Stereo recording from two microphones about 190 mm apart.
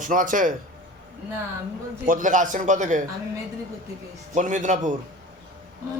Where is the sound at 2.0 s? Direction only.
45° right (ahead or behind).